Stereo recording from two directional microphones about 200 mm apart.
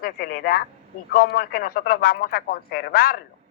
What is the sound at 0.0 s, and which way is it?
Speech, 50° left (ahead or behind).